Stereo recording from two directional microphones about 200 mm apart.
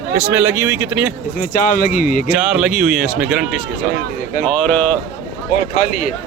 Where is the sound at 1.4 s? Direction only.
40° left (ahead or behind).